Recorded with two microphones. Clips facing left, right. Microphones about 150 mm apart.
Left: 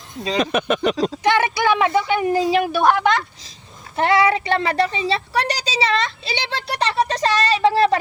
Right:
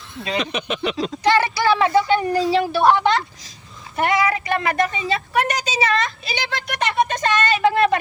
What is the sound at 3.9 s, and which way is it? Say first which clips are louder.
Speech: left 3 dB; 30° left (ahead or behind).